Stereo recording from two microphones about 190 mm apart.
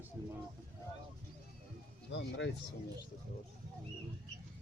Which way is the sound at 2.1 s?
70° left (ahead or behind).